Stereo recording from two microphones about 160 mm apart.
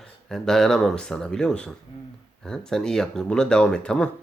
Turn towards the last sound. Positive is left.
turn(degrees=5)  # may be behind; listen again after turning